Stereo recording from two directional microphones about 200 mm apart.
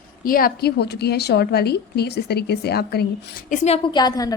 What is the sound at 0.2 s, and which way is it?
A woman's voice, 45° left (ahead or behind).